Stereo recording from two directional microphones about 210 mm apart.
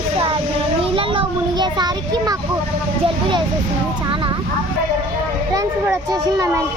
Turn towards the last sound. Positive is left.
turn(degrees=-15)  # may be behind; listen again after turning